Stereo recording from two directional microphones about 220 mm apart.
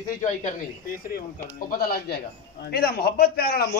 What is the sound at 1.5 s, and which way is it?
A man's voice, 40° left (ahead or behind).